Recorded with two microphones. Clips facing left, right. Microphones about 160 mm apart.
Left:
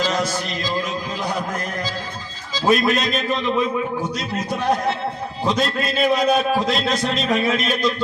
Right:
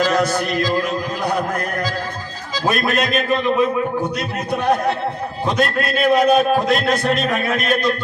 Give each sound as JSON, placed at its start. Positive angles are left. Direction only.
{"t": 0.0, "sound": "a sound", "side_deg": -55}
{"t": 2.6, "sound": "a man's voice", "side_deg": -55}
{"t": 5.5, "sound": "a man's voice", "side_deg": -55}